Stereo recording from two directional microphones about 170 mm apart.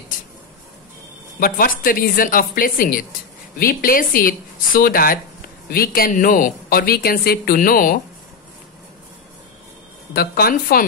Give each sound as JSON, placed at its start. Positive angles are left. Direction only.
{"t": 1.4, "sound": "speech", "side_deg": 55}
{"t": 10.1, "sound": "speech", "side_deg": 65}